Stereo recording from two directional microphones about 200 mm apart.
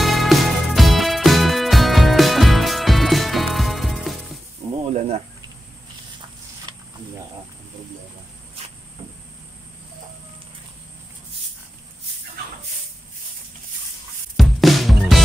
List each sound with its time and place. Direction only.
0.0 s music: centre (ahead or behind)
4.6 s snake: 30° right (ahead or behind)
14.3 s music: centre (ahead or behind)